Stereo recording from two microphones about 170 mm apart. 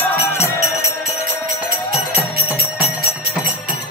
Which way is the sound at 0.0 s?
15° left (ahead or behind).